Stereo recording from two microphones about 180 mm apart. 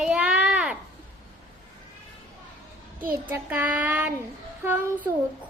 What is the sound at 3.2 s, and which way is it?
Child singing, 10° right (ahead or behind).